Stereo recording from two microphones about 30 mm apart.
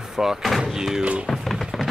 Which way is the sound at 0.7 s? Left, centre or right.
Centre.